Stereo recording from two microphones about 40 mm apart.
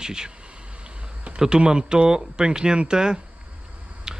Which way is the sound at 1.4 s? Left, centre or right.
Centre.